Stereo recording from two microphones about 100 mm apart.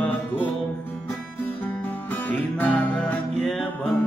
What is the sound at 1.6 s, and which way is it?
Music, 20° left (ahead or behind).